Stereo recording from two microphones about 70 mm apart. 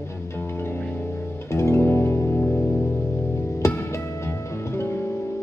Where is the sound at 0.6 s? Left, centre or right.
Left.